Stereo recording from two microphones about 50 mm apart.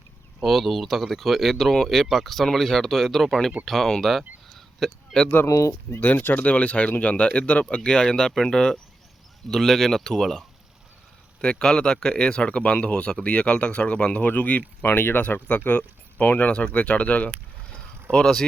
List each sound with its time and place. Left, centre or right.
0.4 s speech: centre
4.4 s a sound: centre
5.9 s speech: left
7.9 s speech: centre; by 14.6 s left
14.8 s speech: left
15.4 s speech: left
18.1 s speech: centre